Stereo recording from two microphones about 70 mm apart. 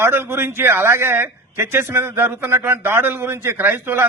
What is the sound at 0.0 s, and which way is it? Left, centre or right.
A man's voice, right.